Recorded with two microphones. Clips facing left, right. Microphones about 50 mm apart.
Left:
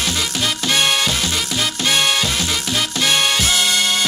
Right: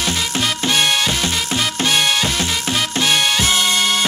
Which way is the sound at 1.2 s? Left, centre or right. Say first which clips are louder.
Right 1 dB; right.